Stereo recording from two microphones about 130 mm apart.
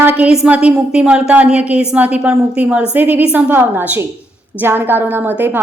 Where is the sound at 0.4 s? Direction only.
10° right (ahead or behind).